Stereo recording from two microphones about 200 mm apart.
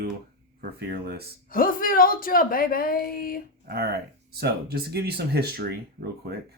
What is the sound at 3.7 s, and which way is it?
Speech, 50° right (ahead or behind).